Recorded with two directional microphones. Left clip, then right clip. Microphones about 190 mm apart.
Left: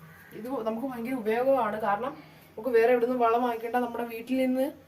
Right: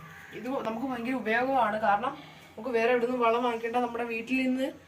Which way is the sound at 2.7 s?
65° left (ahead or behind).